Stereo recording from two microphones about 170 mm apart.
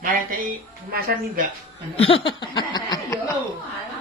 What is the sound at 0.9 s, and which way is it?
Speech, 60° right (ahead or behind).